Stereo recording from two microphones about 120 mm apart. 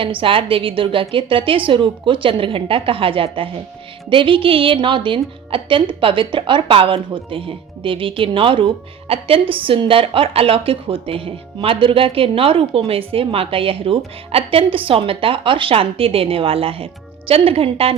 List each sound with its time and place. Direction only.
0.0 s a woman's voice: 45° right (ahead or behind)